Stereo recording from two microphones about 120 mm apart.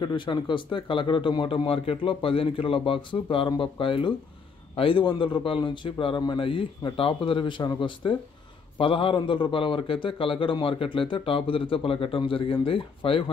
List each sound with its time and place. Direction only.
0.0 s a man's voice: 40° left (ahead or behind)